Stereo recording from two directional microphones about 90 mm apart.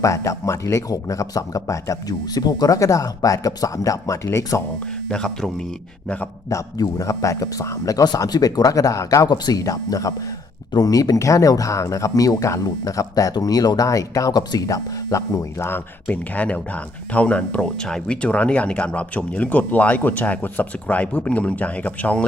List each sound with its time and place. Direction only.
0.0 s speech: 35° left (ahead or behind)
4.9 s speech: 10° left (ahead or behind)
6.5 s speech: 40° left (ahead or behind); by 22.2 s 15° left (ahead or behind)